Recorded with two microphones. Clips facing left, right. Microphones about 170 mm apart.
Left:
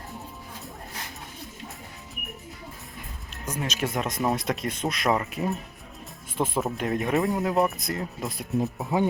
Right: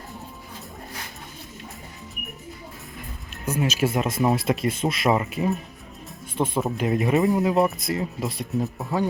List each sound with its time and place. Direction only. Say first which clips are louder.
3.4 s speech: right 6 dB; 10° right (ahead or behind)
8.8 s speech: left 1 dB; 15° left (ahead or behind)